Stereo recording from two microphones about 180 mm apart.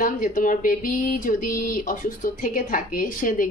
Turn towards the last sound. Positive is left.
turn(degrees=50)  # may be behind; listen again after turning